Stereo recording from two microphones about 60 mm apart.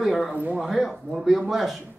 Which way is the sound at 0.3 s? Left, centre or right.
Right.